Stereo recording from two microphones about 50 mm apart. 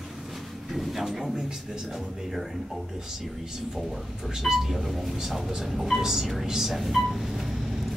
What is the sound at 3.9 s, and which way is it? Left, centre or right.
Speech, centre.